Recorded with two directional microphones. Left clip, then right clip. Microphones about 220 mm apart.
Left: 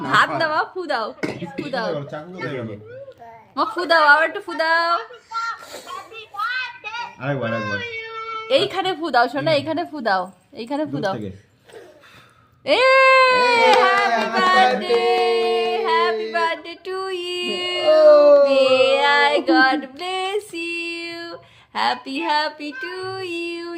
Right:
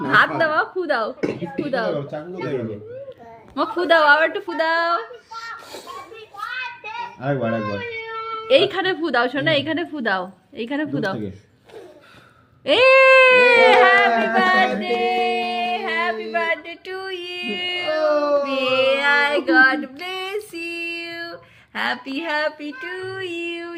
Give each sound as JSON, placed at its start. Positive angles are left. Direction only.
{"t": 0.0, "sound": "a sound", "side_deg": 35}
{"t": 0.3, "sound": "speech", "side_deg": 35}
{"t": 1.2, "sound": "speech", "side_deg": 45}
{"t": 1.7, "sound": "speech", "side_deg": 30}
{"t": 3.5, "sound": "child singing", "side_deg": 30}
{"t": 4.9, "sound": "children playing", "side_deg": 15}
{"t": 7.2, "sound": "speech", "side_deg": 40}
{"t": 7.8, "sound": "music", "side_deg": 10}
{"t": 8.4, "sound": "child singing", "side_deg": 30}
{"t": 12.6, "sound": "speech", "side_deg": 25}
{"t": 14.2, "sound": "a sound", "side_deg": 30}
{"t": 18.2, "sound": "a sound", "side_deg": 40}
{"t": 18.4, "sound": "child singing", "side_deg": 25}